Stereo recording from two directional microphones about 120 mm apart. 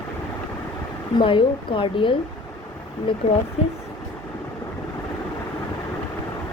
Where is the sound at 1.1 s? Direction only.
45° left (ahead or behind).